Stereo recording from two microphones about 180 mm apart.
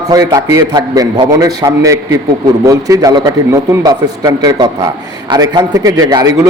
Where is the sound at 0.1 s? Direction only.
20° right (ahead or behind).